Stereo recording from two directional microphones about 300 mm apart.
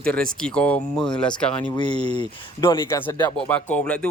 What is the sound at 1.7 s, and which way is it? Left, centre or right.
Speech, centre.